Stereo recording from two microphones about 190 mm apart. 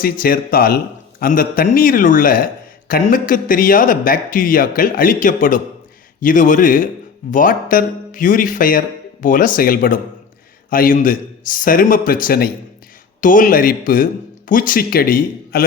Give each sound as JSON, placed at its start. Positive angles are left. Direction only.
{"t": 0.0, "sound": "speech", "side_deg": 50}